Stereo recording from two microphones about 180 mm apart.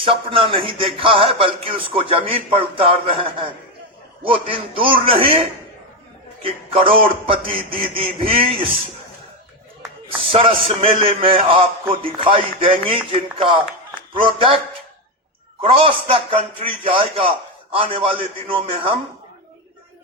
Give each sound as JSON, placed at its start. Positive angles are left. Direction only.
{"t": 0.0, "sound": "a man's voice", "side_deg": -30}
{"t": 10.3, "sound": "a man's voice", "side_deg": -30}
{"t": 14.3, "sound": "speech", "side_deg": -30}
{"t": 15.6, "sound": "speech", "side_deg": -30}